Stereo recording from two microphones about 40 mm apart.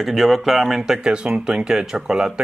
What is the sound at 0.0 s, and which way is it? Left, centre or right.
Speech, centre.